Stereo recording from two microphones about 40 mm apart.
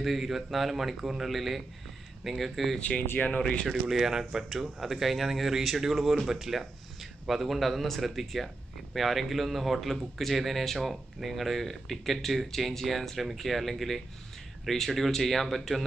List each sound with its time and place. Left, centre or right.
0.0 s speech: centre
3.0 s speech: left
3.3 s speech: left
3.9 s speech: centre